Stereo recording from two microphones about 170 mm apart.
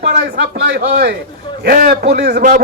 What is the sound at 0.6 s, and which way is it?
A man's voice, 75° right (ahead or behind).